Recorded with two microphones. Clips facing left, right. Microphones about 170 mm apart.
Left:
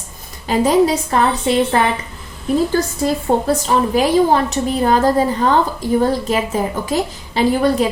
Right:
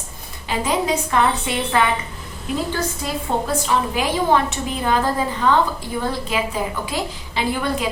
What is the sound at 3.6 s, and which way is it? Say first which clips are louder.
A woman's voice: left 6 dB; 40° left (ahead or behind).